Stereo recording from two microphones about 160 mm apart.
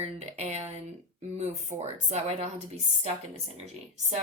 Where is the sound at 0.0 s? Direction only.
45° right (ahead or behind).